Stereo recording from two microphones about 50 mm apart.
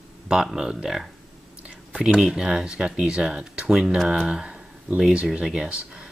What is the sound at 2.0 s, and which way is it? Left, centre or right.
Speech, centre.